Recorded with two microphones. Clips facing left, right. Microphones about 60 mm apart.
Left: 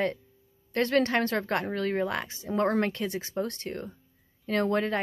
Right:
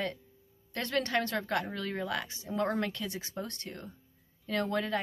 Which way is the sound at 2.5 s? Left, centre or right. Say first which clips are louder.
Left 6 dB; left.